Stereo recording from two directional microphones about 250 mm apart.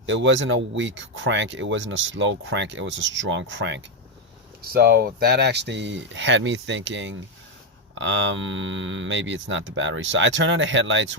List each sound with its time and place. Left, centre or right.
0.0 s speech: right